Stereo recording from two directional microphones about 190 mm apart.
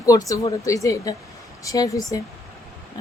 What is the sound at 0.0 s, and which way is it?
Speech, 20° left (ahead or behind).